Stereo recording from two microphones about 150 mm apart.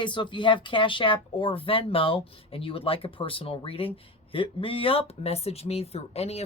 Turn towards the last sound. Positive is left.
turn(degrees=45)  # may be behind; listen again after turning